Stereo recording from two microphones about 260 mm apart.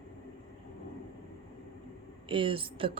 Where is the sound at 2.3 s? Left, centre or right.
Centre.